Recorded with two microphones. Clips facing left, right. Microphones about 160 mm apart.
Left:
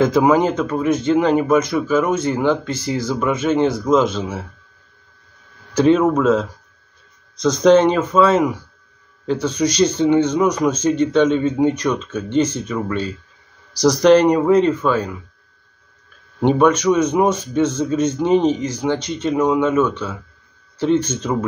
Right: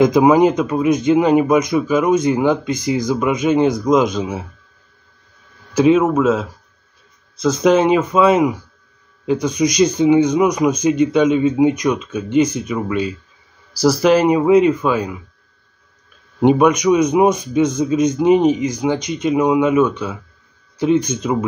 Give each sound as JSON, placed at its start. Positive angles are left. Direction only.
{"t": 0.0, "sound": "speech", "side_deg": -15}
{"t": 5.8, "sound": "speech", "side_deg": -5}
{"t": 16.3, "sound": "speech", "side_deg": -15}